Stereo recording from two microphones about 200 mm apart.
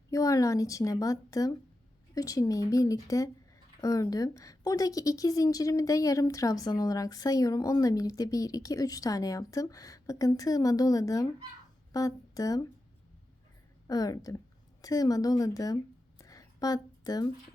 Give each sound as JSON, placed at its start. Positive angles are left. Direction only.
{"t": 0.1, "sound": "a woman's voice", "side_deg": 15}
{"t": 13.8, "sound": "a woman's voice", "side_deg": 20}